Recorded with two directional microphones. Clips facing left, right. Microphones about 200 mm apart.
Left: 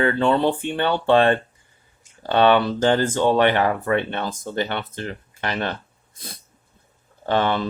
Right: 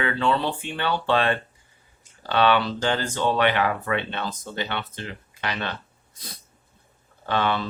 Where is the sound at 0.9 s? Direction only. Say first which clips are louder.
Left 3 dB; 20° left (ahead or behind).